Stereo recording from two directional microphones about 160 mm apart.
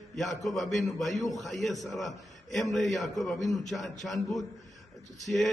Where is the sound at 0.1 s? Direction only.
Centre (ahead or behind).